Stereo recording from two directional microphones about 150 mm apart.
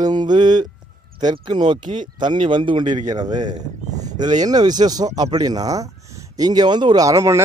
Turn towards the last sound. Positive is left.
turn(degrees=-20)  # may be behind; listen again after turning